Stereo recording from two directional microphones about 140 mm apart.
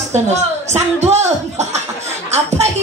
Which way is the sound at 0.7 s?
50° right (ahead or behind).